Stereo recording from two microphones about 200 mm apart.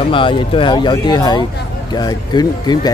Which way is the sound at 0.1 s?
25° left (ahead or behind).